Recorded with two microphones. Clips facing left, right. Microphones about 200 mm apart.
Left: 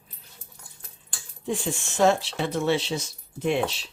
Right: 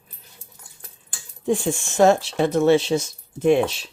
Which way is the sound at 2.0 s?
45° right (ahead or behind).